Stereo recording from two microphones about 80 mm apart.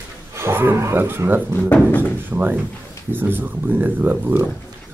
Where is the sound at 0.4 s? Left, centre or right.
Right.